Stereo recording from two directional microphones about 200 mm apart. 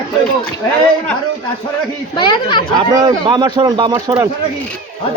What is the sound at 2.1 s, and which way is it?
Speech, 25° left (ahead or behind).